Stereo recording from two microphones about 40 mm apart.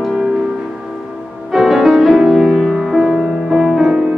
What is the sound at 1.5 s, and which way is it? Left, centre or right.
Music, centre.